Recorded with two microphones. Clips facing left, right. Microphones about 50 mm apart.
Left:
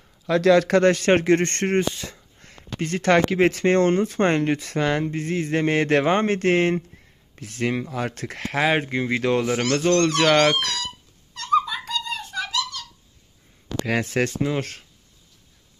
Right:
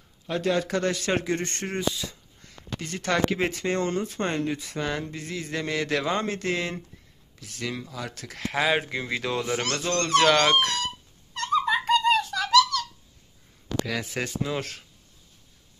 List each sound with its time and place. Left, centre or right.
0.3 s a man's voice: left
5.0 s a man's voice: left
10.6 s speech: right
11.6 s a sound: right
12.0 s a sound: right
14.0 s speech: left
14.4 s speech: left